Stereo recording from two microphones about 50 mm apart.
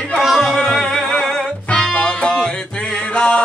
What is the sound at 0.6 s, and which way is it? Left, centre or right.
Music, centre.